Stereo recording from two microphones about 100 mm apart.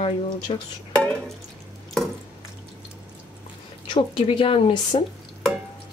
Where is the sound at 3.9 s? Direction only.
60° left (ahead or behind).